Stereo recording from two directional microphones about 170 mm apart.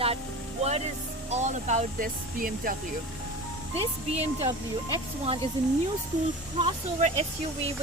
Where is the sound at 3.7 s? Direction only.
35° right (ahead or behind).